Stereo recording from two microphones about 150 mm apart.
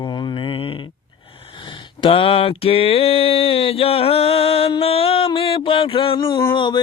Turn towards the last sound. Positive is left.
turn(degrees=30)  # may be behind; listen again after turning